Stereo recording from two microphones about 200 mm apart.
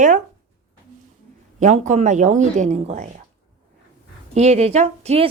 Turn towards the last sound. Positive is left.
turn(degrees=-30)  # may be behind; listen again after turning